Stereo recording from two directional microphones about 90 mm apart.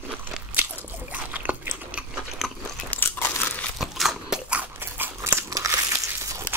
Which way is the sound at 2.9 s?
20° left (ahead or behind).